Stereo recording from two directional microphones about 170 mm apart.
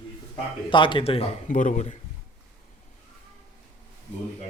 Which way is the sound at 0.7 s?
30° left (ahead or behind).